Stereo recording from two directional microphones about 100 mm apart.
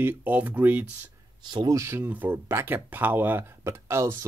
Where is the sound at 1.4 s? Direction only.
45° right (ahead or behind).